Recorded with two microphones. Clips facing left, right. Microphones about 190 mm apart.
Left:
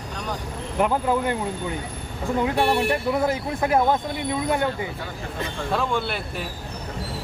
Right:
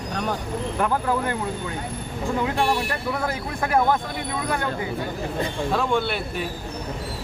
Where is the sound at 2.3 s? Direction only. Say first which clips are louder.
Left 3 dB; 20° left (ahead or behind).